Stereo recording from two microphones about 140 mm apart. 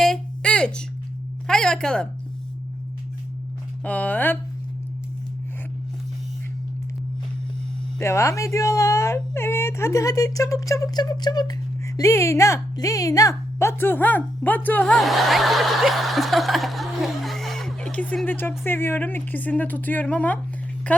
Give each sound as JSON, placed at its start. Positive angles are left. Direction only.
{"t": 0.0, "sound": "a sound", "side_deg": 5}
{"t": 3.8, "sound": "a woman's voice", "side_deg": 10}
{"t": 7.9, "sound": "a woman's voice", "side_deg": 20}